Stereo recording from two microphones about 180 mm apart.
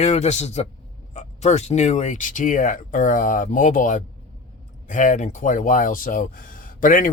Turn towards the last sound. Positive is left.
turn(degrees=45)  # may be behind; listen again after turning